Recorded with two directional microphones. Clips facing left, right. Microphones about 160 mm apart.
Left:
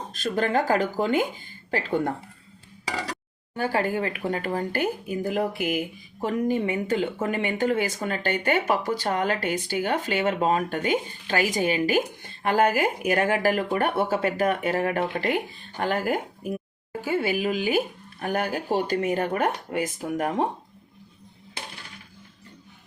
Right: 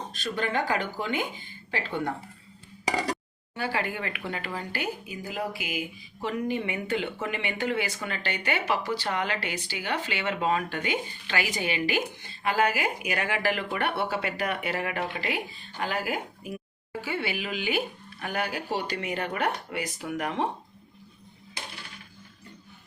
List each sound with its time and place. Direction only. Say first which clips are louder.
0.1 s speech: left 6 dB; 45° left (ahead or behind)
3.5 s speech: left 6 dB; 45° left (ahead or behind)
6.2 s speech: left 5 dB; 45° left (ahead or behind)